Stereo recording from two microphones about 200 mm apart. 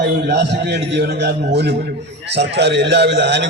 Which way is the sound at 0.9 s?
55° right (ahead or behind).